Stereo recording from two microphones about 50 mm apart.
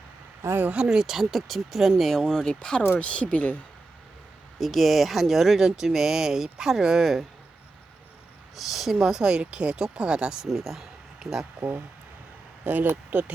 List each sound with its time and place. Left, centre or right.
0.4 s speech: right
0.9 s speech: centre; by 3.6 s left
4.5 s speech: centre
8.5 s speech: centre
10.4 s speech: centre
12.6 s speech: right